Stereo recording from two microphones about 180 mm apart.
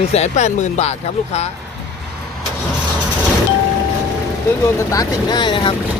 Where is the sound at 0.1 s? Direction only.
40° left (ahead or behind).